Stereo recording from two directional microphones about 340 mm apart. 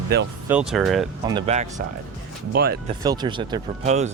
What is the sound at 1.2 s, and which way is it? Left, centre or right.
Speech, centre.